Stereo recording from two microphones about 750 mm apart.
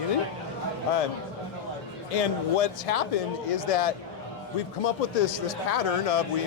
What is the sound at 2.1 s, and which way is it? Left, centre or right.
Speech, left.